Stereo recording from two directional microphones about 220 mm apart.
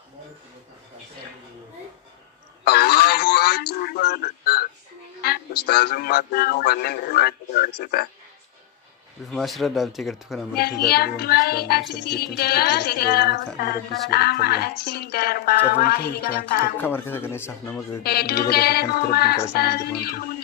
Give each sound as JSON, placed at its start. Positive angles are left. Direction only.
{"t": 2.6, "sound": "a sound", "side_deg": 45}
{"t": 5.6, "sound": "speech", "side_deg": 45}
{"t": 9.3, "sound": "speech", "side_deg": 0}
{"t": 10.5, "sound": "speech", "side_deg": 45}
{"t": 16.8, "sound": "speech", "side_deg": 10}
{"t": 18.0, "sound": "speech", "side_deg": 45}